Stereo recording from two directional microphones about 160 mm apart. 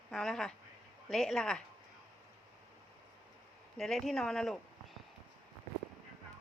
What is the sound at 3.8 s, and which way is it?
Speech, centre (ahead or behind).